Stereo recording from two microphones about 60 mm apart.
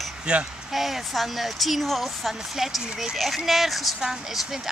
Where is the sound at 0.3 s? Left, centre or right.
Centre.